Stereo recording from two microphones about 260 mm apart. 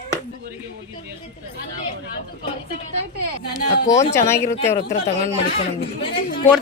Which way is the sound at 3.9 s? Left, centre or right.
Centre.